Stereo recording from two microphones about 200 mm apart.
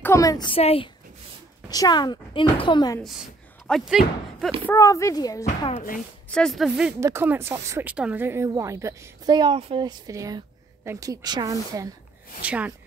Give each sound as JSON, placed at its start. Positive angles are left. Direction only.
{"t": 0.0, "sound": "speech", "side_deg": 15}
{"t": 3.6, "sound": "speech", "side_deg": 0}
{"t": 4.6, "sound": "speech", "side_deg": 15}
{"t": 5.6, "sound": "speech", "side_deg": 30}
{"t": 5.9, "sound": "speech", "side_deg": 0}
{"t": 7.0, "sound": "speech", "side_deg": -15}
{"t": 12.4, "sound": "speech", "side_deg": -5}